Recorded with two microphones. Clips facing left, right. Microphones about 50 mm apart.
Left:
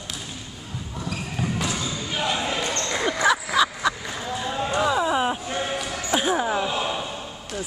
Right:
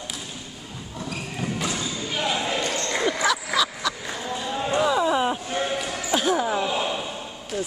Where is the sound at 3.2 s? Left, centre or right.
Left.